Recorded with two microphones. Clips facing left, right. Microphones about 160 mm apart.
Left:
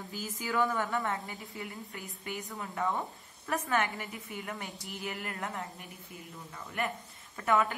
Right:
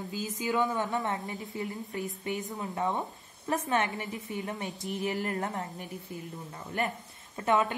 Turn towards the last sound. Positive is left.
turn(degrees=-20)  # may be behind; listen again after turning